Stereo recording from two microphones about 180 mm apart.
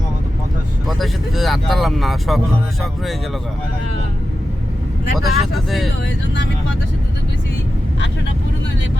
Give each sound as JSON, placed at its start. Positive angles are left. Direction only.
{"t": 0.9, "sound": "speech", "side_deg": 0}
{"t": 5.1, "sound": "speech", "side_deg": 0}
{"t": 6.3, "sound": "speech", "side_deg": 80}